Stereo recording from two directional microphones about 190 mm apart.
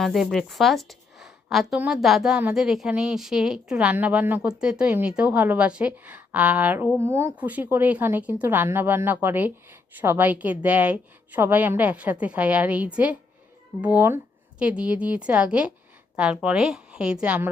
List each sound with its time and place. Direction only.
0.0 s a woman's voice: centre (ahead or behind)